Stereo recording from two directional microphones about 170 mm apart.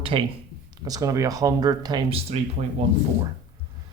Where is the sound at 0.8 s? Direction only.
20° right (ahead or behind).